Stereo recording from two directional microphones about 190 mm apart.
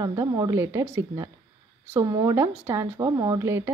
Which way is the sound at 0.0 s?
20° right (ahead or behind).